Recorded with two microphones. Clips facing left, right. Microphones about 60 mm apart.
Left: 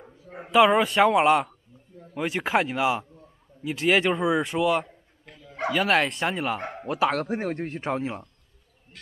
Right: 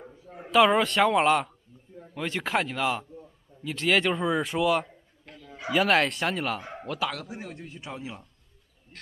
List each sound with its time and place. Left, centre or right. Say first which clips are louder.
0.5 s speech: left 2 dB; centre
7.1 s a man's voice: left 10 dB; left